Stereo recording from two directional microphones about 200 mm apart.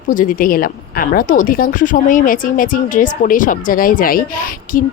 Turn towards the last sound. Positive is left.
turn(degrees=45)  # may be behind; listen again after turning